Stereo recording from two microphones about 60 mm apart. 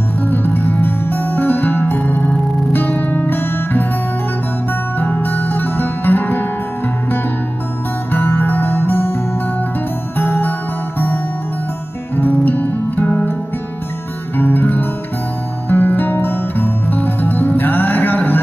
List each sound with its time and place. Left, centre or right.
0.2 s music: left
4.9 s music: left
8.1 s music: left
10.1 s music: left
12.2 s music: left
14.3 s music: left